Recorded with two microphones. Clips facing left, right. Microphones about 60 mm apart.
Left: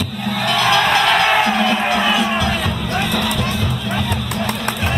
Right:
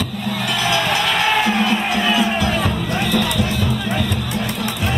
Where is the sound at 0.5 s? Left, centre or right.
Left.